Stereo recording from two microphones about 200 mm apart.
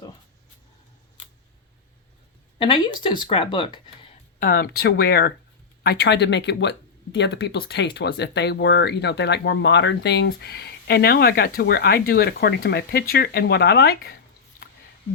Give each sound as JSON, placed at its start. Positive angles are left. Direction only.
{"t": 2.6, "sound": "speech", "side_deg": 25}
{"t": 4.4, "sound": "speech", "side_deg": 50}